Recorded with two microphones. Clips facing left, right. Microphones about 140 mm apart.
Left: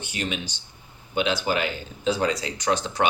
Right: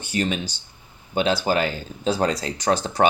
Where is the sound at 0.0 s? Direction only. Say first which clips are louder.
Right 6 dB; 40° right (ahead or behind).